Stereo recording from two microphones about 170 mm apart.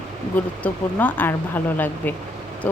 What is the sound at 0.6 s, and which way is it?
Speech, 10° left (ahead or behind).